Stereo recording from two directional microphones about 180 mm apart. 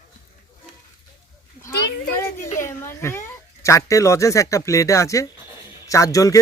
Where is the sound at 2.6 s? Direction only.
15° left (ahead or behind).